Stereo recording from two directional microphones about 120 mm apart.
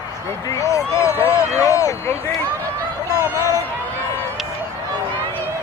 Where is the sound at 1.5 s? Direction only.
25° left (ahead or behind).